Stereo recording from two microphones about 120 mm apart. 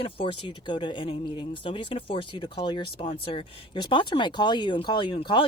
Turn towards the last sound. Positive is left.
turn(degrees=45)  # may be behind; listen again after turning